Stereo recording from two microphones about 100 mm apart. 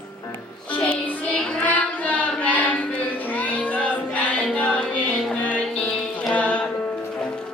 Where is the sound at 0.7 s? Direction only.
10° left (ahead or behind).